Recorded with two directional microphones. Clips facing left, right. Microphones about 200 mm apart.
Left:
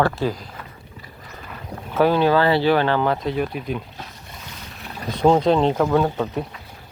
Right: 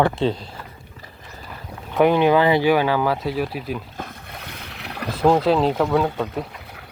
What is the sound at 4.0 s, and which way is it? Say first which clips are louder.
Boat: right 4 dB; 60° right (ahead or behind).